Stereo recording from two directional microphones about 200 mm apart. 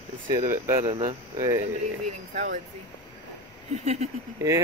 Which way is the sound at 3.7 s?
30° right (ahead or behind).